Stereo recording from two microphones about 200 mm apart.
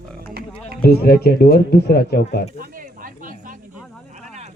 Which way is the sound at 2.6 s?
45° right (ahead or behind).